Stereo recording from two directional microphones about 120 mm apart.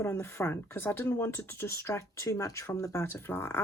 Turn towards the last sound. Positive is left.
turn(degrees=20)  # may be behind; listen again after turning